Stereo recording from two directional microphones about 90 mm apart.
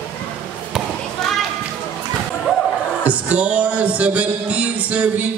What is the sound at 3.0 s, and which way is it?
Speech, 15° right (ahead or behind).